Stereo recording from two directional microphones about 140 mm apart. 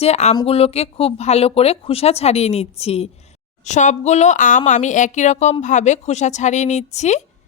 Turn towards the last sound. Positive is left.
turn(degrees=55)  # may be behind; listen again after turning